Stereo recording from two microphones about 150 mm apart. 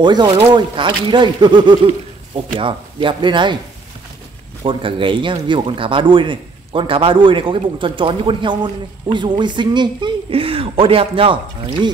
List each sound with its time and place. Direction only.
0.0 s speech: 30° right (ahead or behind)
4.6 s speech: 35° right (ahead or behind)